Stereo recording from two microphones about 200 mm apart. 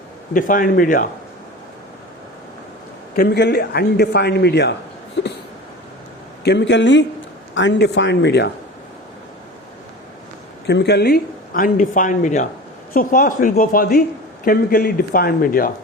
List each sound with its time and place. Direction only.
0.3 s speech: 40° left (ahead or behind)
3.2 s a man's voice: 55° left (ahead or behind)
5.2 s a sound: 60° left (ahead or behind)
6.4 s a man's voice: 60° left (ahead or behind)
10.7 s speech: 55° left (ahead or behind)